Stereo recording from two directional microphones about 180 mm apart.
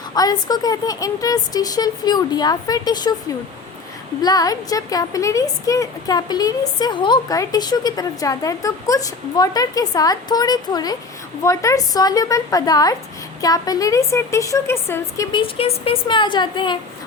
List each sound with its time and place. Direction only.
0.1 s speech: 20° left (ahead or behind)
4.2 s a woman's voice: 20° left (ahead or behind)
15.3 s speech: 30° left (ahead or behind)